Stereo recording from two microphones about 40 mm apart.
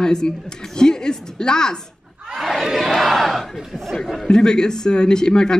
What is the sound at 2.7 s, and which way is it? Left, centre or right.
Crowd, centre.